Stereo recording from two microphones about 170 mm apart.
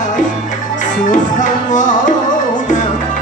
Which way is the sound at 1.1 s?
45° left (ahead or behind).